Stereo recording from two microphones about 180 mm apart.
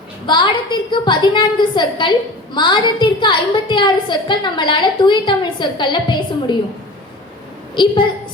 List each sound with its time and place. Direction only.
0.3 s a woman's voice: 25° left (ahead or behind)
7.8 s a woman's voice: 25° left (ahead or behind)